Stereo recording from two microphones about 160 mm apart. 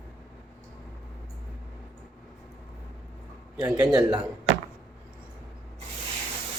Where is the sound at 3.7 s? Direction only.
20° right (ahead or behind).